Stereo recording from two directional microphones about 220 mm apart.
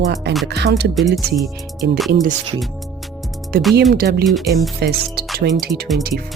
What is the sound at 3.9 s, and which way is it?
Speech, 45° right (ahead or behind).